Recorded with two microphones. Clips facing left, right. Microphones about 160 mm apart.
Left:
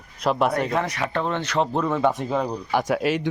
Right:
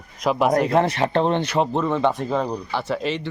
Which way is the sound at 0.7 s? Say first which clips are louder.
Right 6 dB; 30° right (ahead or behind).